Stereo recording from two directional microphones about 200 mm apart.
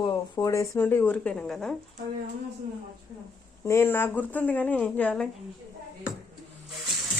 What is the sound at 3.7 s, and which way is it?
Speech, 10° left (ahead or behind).